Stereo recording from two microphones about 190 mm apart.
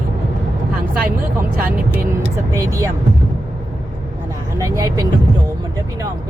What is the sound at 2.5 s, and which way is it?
Speech, 15° right (ahead or behind).